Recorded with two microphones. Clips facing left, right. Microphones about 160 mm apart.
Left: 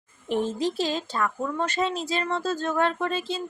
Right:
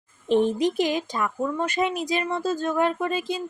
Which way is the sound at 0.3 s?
20° right (ahead or behind).